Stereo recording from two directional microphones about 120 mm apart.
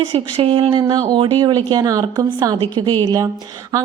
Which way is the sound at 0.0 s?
50° right (ahead or behind).